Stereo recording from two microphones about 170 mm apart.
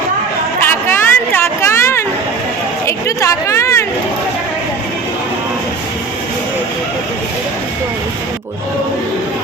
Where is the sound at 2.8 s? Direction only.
15° left (ahead or behind).